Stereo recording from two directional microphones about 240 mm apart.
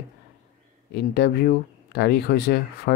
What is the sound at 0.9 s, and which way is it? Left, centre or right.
Speech, left.